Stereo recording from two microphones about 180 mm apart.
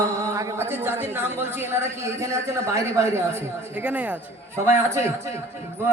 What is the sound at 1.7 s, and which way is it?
A man's voice, 15° right (ahead or behind).